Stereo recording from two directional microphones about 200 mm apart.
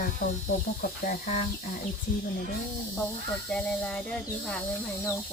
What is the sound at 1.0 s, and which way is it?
Speech, 40° left (ahead or behind).